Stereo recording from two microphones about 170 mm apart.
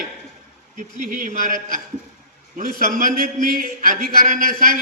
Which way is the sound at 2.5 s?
55° right (ahead or behind).